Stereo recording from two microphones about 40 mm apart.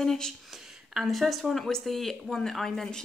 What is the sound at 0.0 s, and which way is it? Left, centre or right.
Speech, centre.